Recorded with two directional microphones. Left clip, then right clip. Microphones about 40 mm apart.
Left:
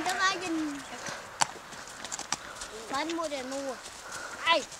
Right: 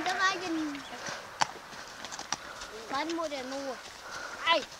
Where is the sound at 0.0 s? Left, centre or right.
Left.